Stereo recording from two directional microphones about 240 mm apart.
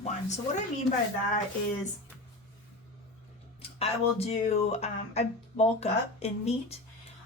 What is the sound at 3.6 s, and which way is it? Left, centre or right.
Speech, left.